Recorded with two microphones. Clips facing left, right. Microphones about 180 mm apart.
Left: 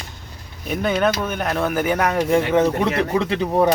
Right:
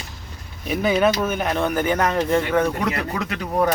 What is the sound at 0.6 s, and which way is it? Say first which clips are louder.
Speech: right 1 dB; 5° right (ahead or behind).